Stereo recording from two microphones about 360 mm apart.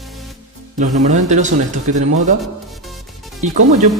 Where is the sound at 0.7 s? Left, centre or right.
Centre.